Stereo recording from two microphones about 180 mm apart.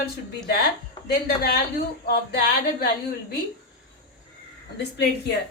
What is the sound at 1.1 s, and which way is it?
A woman's voice, 60° left (ahead or behind).